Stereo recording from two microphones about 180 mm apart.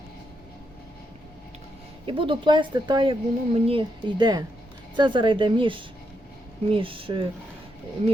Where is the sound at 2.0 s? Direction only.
30° right (ahead or behind).